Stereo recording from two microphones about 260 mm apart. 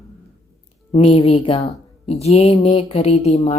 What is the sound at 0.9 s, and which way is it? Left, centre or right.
A woman's voice, left.